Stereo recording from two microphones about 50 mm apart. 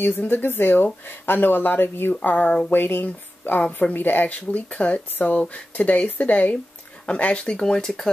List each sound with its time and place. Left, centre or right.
0.0 s speech: left
2.2 s speech: left
7.6 s speech: centre